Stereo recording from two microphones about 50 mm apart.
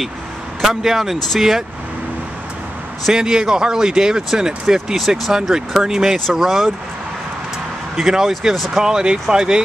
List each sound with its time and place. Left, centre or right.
0.6 s speech: centre
3.1 s speech: centre
7.9 s speech: centre
8.8 s speech: centre